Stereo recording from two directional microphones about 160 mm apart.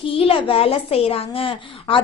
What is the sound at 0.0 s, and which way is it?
A woman's voice, 35° left (ahead or behind).